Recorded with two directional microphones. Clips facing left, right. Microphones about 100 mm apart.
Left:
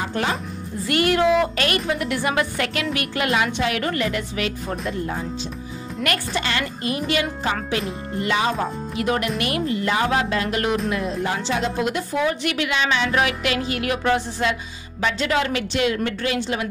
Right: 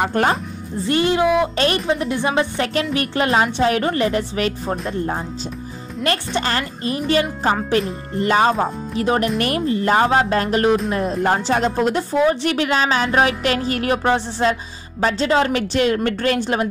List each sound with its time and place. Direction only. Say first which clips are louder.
0.0 s speech: right 6 dB; 50° right (ahead or behind)
0.8 s a woman's voice: right 1 dB; 25° right (ahead or behind)
8.2 s a woman's voice: right 6 dB; 40° right (ahead or behind)